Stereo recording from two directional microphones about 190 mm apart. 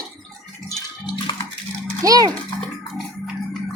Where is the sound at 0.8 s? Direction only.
25° left (ahead or behind).